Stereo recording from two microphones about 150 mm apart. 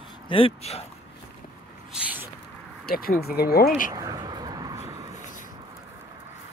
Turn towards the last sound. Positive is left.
turn(degrees=-20)  # may be behind; listen again after turning